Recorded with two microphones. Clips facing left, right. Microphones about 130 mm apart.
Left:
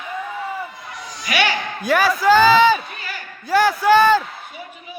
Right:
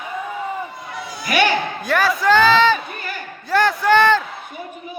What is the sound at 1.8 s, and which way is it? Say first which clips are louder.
A man's voice: left 4 dB; centre (ahead or behind).